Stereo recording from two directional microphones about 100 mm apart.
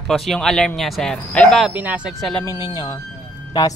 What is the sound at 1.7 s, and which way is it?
Speech, 15° right (ahead or behind).